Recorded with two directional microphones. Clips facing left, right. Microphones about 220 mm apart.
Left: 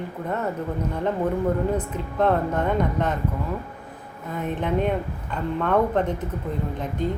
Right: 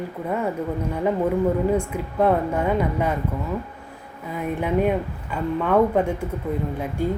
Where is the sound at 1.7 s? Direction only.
10° right (ahead or behind).